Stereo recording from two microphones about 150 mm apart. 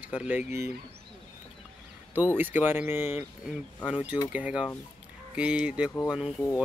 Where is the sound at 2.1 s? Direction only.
10° right (ahead or behind).